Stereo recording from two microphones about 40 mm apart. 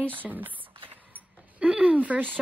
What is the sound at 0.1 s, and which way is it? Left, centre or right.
Speech, right.